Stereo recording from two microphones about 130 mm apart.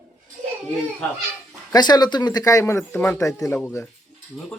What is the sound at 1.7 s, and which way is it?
Speech, 30° left (ahead or behind).